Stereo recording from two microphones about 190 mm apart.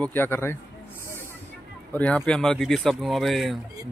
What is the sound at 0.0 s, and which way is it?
Speech, 10° left (ahead or behind).